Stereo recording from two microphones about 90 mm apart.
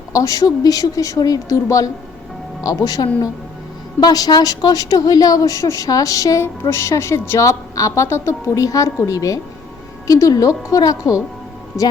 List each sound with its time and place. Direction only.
0.1 s a woman's voice: 40° left (ahead or behind)